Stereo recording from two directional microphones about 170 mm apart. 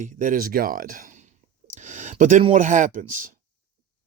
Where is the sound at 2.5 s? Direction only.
50° right (ahead or behind).